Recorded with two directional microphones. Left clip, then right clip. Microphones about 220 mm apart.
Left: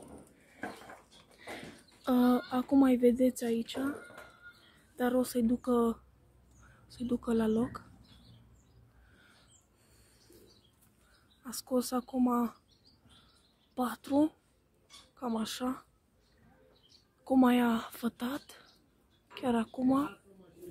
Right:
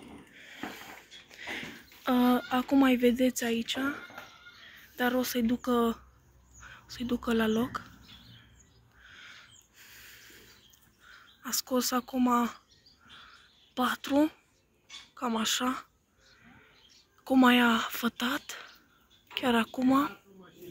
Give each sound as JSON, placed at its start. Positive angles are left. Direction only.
{"t": 1.1, "sound": "a sound", "side_deg": 55}
{"t": 2.0, "sound": "speech", "side_deg": 5}
{"t": 4.9, "sound": "speech", "side_deg": 10}
{"t": 11.4, "sound": "speech", "side_deg": 5}
{"t": 13.7, "sound": "speech", "side_deg": 5}
{"t": 14.9, "sound": "a sound", "side_deg": 55}
{"t": 15.2, "sound": "speech", "side_deg": 0}
{"t": 17.2, "sound": "speech", "side_deg": 5}